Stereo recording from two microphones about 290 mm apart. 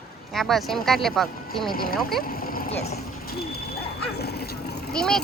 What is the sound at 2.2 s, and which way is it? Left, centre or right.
Vehicle, left.